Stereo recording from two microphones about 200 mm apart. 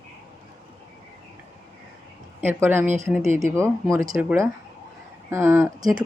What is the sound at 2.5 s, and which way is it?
Speech, 10° right (ahead or behind).